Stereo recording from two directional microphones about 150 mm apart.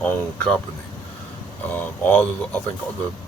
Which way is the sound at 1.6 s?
15° left (ahead or behind).